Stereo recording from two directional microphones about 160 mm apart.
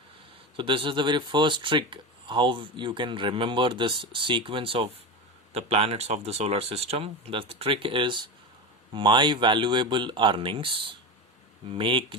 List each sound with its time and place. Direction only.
0.5 s speech: 30° right (ahead or behind)